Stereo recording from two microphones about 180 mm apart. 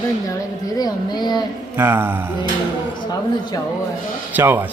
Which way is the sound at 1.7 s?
15° right (ahead or behind).